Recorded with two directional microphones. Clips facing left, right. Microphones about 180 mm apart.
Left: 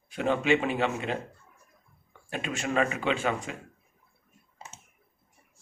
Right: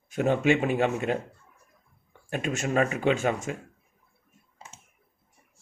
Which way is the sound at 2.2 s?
45° right (ahead or behind).